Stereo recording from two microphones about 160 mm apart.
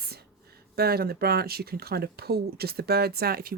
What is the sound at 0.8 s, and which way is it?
Speech, 75° right (ahead or behind).